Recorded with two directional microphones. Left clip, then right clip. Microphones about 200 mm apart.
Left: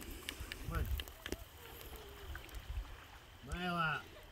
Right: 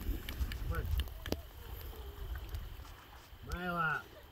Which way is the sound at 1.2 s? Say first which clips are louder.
Right 6 dB; 55° right (ahead or behind).